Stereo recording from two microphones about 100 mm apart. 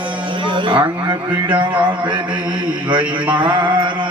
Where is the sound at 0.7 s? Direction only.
50° right (ahead or behind).